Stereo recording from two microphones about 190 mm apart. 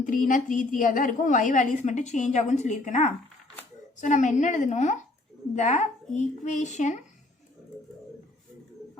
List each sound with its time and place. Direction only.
0.0 s a woman's voice: 45° left (ahead or behind)